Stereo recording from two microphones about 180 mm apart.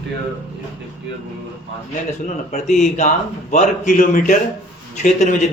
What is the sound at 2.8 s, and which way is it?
A man's voice, 40° left (ahead or behind).